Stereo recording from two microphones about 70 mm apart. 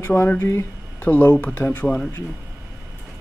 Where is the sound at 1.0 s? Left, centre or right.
Left.